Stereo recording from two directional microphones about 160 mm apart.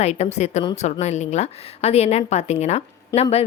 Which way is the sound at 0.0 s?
45° left (ahead or behind).